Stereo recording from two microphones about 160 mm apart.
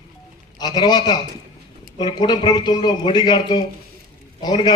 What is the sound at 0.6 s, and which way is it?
A man's voice, 25° left (ahead or behind).